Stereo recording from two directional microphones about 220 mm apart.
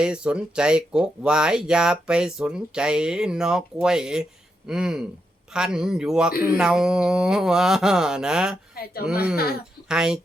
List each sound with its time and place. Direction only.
0.0 s speech: 5° right (ahead or behind)
9.3 s speech: 45° left (ahead or behind)
9.9 s speech: 5° right (ahead or behind)